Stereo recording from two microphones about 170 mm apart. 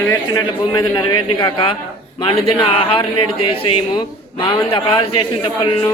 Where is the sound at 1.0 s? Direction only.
30° left (ahead or behind).